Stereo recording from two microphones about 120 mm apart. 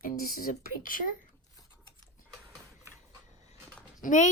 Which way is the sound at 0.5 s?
90° left.